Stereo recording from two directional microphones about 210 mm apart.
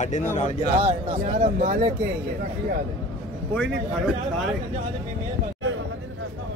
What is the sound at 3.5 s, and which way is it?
Speech, 5° left (ahead or behind).